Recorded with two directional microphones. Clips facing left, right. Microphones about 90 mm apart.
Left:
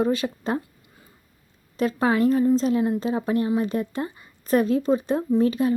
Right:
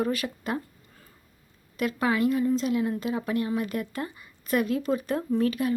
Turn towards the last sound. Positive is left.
turn(degrees=25)  # may be behind; listen again after turning